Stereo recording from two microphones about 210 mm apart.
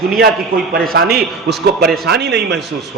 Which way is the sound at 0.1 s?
45° right (ahead or behind).